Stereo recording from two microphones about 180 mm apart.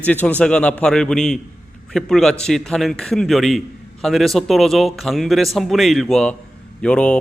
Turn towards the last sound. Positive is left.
turn(degrees=5)  # may be behind; listen again after turning